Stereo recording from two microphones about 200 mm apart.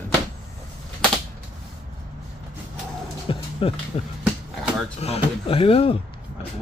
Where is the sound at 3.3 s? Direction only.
25° left (ahead or behind).